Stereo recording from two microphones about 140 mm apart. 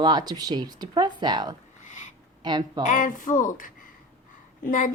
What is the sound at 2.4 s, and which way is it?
Speech, 30° right (ahead or behind).